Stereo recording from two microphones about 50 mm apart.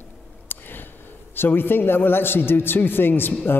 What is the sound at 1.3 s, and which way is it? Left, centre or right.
A man's voice, left.